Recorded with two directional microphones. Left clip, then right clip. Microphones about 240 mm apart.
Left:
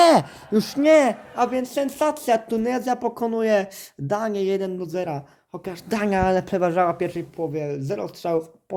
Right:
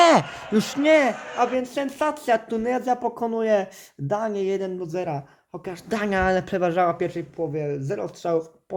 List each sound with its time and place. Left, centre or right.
0.0 s a sound: centre
0.8 s a man's voice: centre
1.4 s speech: left